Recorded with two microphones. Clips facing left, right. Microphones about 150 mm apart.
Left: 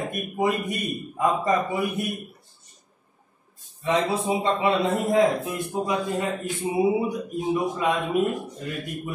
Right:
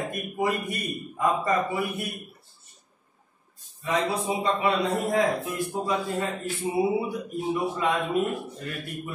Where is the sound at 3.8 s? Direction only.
25° left (ahead or behind).